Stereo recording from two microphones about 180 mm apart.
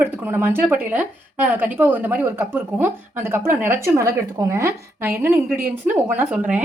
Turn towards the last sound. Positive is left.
turn(degrees=-10)  # may be behind; listen again after turning